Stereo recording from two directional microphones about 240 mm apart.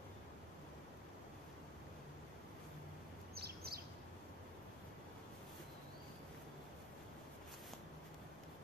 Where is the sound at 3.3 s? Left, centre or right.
Right.